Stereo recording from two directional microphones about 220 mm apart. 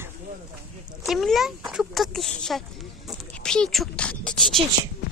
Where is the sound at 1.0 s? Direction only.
Centre (ahead or behind).